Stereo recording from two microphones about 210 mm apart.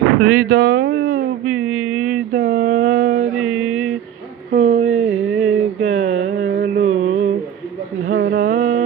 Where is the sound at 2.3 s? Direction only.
40° right (ahead or behind).